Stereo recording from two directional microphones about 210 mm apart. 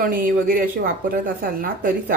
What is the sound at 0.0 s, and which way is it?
A woman's voice, 40° right (ahead or behind).